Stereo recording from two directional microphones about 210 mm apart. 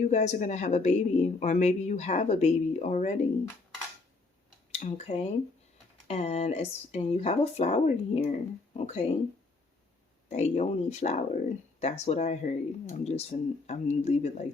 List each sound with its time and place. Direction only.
0.0 s speech: 35° left (ahead or behind)
4.8 s speech: 35° left (ahead or behind)
10.2 s speech: 30° left (ahead or behind)